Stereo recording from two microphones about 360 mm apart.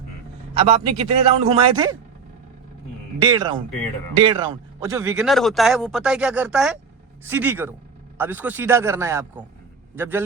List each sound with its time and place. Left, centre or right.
0.6 s a man's voice: centre
3.2 s a man's voice: centre